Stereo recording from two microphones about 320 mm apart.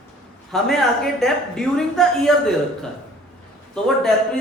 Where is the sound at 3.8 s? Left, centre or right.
Centre.